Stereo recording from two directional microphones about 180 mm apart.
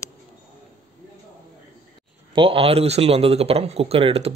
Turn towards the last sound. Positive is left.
turn(degrees=-35)  # may be behind; listen again after turning